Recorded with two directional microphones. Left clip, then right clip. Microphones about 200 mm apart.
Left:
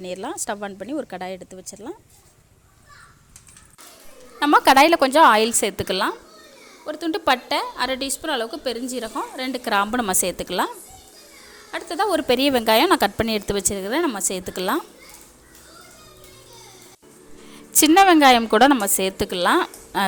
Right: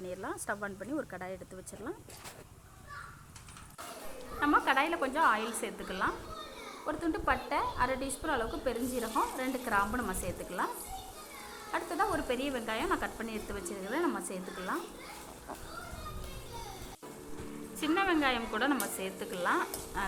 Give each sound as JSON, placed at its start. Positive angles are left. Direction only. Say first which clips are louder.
{"t": 0.0, "sound": "a woman's voice", "louder": "left 10 dB", "side_deg": 45}
{"t": 4.4, "sound": "a woman's voice", "louder": "left 14 dB", "side_deg": 60}
{"t": 6.8, "sound": "a woman's voice", "louder": "left 11 dB", "side_deg": 35}
{"t": 11.7, "sound": "a woman's voice", "louder": "left 8 dB", "side_deg": 40}
{"t": 12.1, "sound": "a woman's voice", "louder": "left 15 dB", "side_deg": 65}
{"t": 14.5, "sound": "a woman's voice", "louder": "left 13 dB", "side_deg": 60}
{"t": 17.7, "sound": "a woman's voice", "louder": "left 17 dB", "side_deg": 65}